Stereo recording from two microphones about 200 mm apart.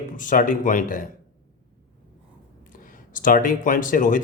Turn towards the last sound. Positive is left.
turn(degrees=40)  # may be behind; listen again after turning